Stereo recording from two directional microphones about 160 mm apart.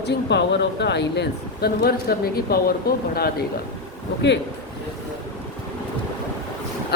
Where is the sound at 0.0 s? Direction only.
90° left; by 2.7 s 75° left (ahead or behind).